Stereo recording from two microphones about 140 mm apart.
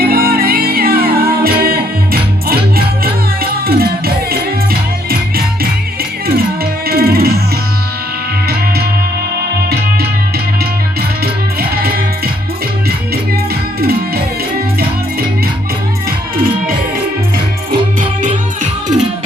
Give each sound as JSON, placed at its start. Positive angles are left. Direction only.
{"t": 0.0, "sound": "music", "side_deg": -90}
{"t": 6.8, "sound": "music", "side_deg": -90}
{"t": 11.8, "sound": "music", "side_deg": -90}
{"t": 18.6, "sound": "music", "side_deg": -60}